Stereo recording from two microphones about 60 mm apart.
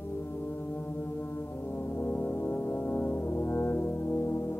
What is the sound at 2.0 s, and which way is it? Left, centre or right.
Brass instrument, left.